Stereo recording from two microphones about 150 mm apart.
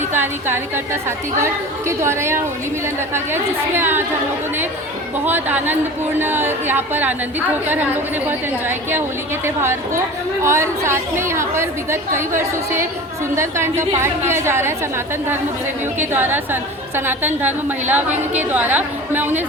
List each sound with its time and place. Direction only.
0.1 s a woman's voice: 15° right (ahead or behind)
1.9 s a woman's voice: 15° right (ahead or behind)
5.2 s a woman's voice: 10° right (ahead or behind)
13.3 s a woman's voice: 15° right (ahead or behind)